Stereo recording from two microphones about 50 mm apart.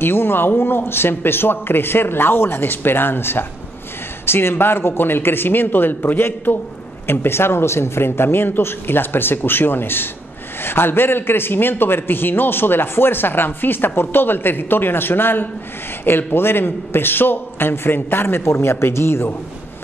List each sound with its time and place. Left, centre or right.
0.0 s speech: left